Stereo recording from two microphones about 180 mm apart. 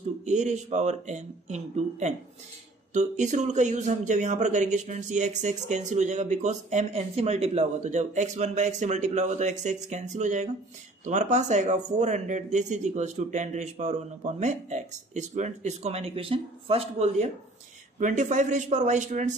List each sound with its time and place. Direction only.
0.2 s speech: 40° right (ahead or behind)